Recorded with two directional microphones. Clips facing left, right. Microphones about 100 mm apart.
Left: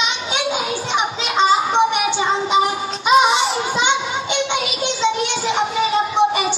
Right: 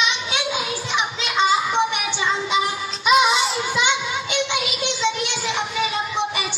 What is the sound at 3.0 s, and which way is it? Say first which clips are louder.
Music: left 3 dB; 25° left (ahead or behind).